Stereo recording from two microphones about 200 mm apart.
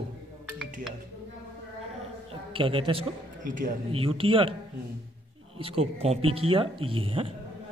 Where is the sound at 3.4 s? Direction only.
40° right (ahead or behind).